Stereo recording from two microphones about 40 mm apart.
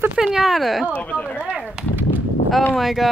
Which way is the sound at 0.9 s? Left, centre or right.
Left.